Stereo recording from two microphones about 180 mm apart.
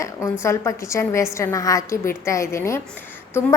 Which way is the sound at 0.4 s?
15° left (ahead or behind).